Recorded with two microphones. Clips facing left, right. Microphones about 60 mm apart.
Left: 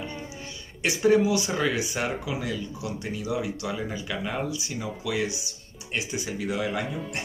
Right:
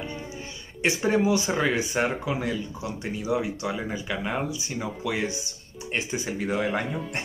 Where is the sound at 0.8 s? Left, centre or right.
Right.